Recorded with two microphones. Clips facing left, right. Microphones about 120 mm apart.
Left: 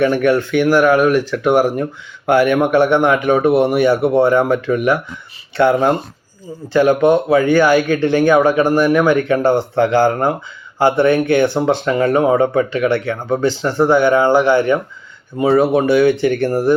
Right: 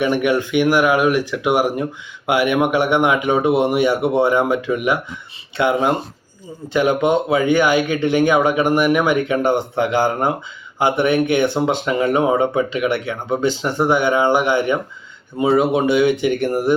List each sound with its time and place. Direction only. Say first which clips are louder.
0.0 s speech: left 3 dB; 15° right (ahead or behind)